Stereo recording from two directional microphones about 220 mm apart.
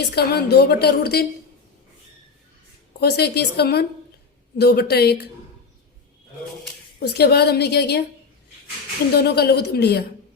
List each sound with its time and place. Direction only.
0.1 s a woman's voice: 45° left (ahead or behind)
3.0 s a woman's voice: 45° left (ahead or behind)
7.0 s a woman's voice: 50° left (ahead or behind)
9.1 s a woman's voice: 45° left (ahead or behind)